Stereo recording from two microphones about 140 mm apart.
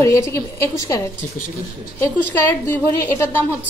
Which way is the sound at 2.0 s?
15° left (ahead or behind).